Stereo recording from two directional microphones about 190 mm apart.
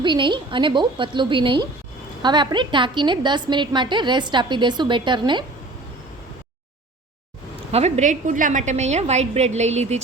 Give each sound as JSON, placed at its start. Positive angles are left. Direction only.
{"t": 0.0, "sound": "a woman's voice", "side_deg": -25}
{"t": 7.7, "sound": "a woman's voice", "side_deg": -35}